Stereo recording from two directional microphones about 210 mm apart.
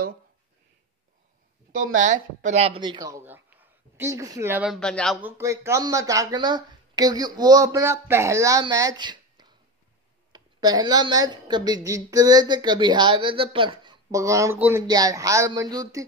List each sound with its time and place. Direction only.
1.7 s speech: 40° right (ahead or behind); by 4.7 s 10° right (ahead or behind)
4.7 s speech: 5° left (ahead or behind)
5.2 s a woman's voice: 15° right (ahead or behind)